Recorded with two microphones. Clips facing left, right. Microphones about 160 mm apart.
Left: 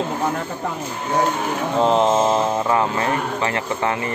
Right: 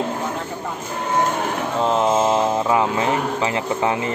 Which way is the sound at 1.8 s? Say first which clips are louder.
Left 2 dB; centre (ahead or behind).